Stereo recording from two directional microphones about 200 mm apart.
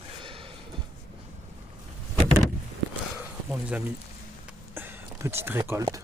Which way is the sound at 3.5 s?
10° right (ahead or behind).